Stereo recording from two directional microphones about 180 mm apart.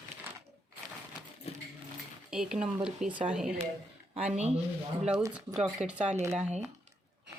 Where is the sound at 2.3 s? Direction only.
5° right (ahead or behind).